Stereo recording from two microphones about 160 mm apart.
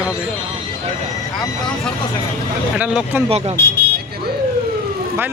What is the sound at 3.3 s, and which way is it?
Speech, 40° right (ahead or behind).